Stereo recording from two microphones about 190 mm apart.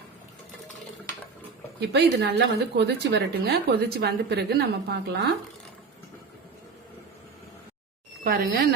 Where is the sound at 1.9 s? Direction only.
60° right (ahead or behind).